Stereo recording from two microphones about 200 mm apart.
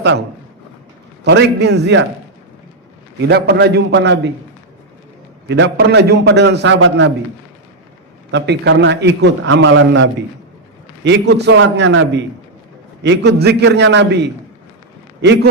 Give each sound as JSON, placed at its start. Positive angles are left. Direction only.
{"t": 0.0, "sound": "a man's voice", "side_deg": -60}
{"t": 3.2, "sound": "a man's voice", "side_deg": -55}
{"t": 5.5, "sound": "a man's voice", "side_deg": -60}
{"t": 8.3, "sound": "a man's voice", "side_deg": -60}